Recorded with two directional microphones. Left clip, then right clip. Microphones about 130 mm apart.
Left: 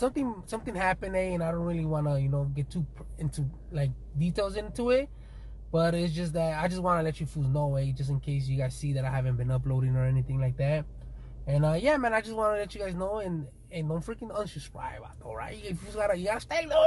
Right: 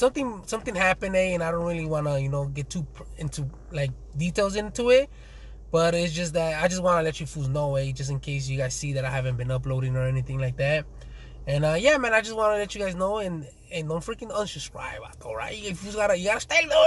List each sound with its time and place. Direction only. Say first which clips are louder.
0.0 s speech: right 6 dB; 15° right (ahead or behind)
3.7 s speech: right 6 dB; 15° right (ahead or behind)